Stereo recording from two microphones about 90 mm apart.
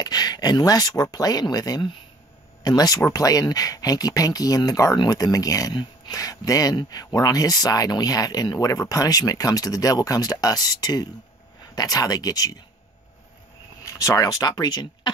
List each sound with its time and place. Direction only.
0.0 s speech: 50° left (ahead or behind)
13.8 s speech: 35° left (ahead or behind)